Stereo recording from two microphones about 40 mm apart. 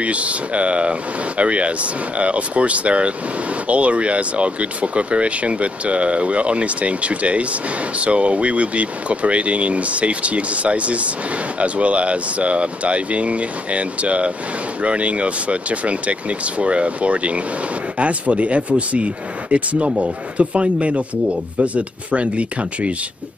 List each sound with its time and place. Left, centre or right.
0.0 s speech: right